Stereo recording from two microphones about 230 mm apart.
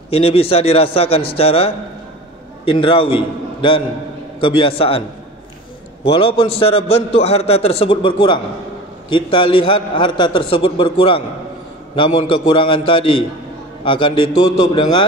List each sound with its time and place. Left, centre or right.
0.1 s a man's voice: left
4.4 s a man's voice: left
6.0 s a man's voice: left